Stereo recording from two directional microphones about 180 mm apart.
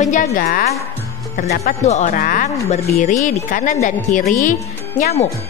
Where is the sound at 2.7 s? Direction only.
35° left (ahead or behind).